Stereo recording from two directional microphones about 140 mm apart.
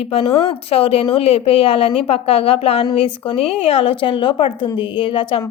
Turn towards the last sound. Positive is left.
turn(degrees=40)  # may be behind; listen again after turning